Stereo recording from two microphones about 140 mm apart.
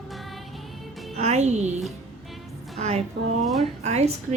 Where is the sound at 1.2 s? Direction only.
55° right (ahead or behind).